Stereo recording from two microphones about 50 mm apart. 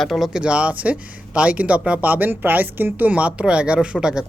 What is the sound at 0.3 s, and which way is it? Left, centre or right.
Speech, right.